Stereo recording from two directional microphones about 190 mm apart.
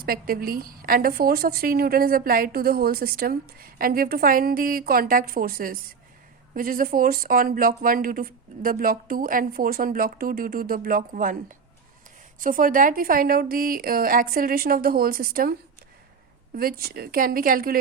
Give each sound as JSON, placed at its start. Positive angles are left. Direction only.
{"t": 0.0, "sound": "a woman's voice", "side_deg": -50}
{"t": 16.6, "sound": "a woman's voice", "side_deg": -50}